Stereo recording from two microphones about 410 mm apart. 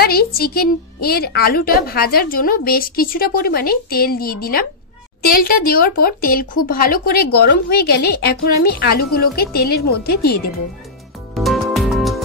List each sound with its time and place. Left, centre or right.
0.0 s a woman's voice: left
11.3 s music: centre